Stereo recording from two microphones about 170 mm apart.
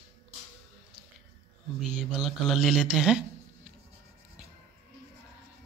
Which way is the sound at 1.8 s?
Centre (ahead or behind).